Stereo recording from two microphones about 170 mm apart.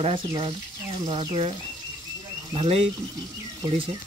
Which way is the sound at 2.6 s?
35° right (ahead or behind).